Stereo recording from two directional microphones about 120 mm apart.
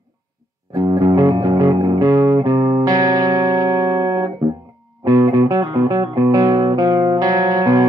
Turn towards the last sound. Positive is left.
turn(degrees=-30)  # may be behind; listen again after turning